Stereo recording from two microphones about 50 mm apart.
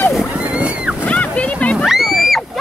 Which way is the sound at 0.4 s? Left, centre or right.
Right.